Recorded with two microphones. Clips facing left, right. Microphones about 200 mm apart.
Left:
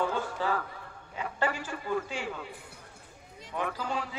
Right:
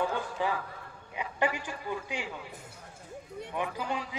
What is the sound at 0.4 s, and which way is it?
A man's voice, 15° right (ahead or behind).